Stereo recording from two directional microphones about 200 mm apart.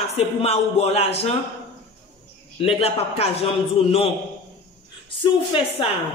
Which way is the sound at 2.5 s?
30° left (ahead or behind).